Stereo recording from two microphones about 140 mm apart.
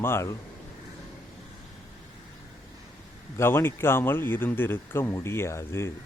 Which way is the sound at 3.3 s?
15° left (ahead or behind).